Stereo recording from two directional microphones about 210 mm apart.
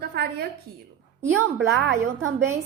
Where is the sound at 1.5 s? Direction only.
60° right (ahead or behind).